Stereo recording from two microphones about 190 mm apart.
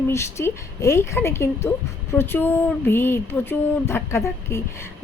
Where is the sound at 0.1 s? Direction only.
15° left (ahead or behind).